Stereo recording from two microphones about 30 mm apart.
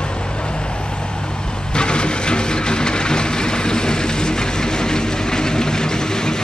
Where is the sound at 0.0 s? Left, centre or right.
Left.